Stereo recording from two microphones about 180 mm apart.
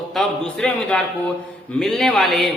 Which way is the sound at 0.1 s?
5° left (ahead or behind).